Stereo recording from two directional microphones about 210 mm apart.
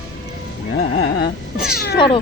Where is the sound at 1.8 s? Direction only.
55° left (ahead or behind).